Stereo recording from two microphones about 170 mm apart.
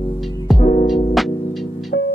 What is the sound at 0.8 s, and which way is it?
Music, centre (ahead or behind).